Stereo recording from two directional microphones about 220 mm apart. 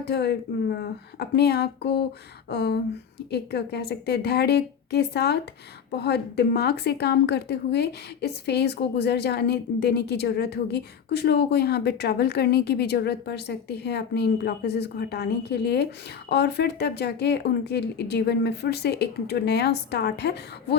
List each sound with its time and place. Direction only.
0.0 s speech: 50° left (ahead or behind)